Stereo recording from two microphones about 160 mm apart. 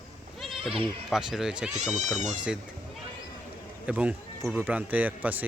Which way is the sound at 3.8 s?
10° right (ahead or behind).